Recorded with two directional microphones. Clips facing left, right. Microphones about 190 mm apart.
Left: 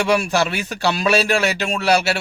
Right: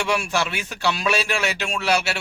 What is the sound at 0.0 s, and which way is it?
A man's voice, 40° left (ahead or behind).